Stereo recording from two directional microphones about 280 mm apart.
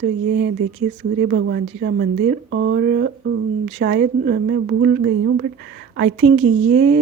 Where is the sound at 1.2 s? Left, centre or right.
Right.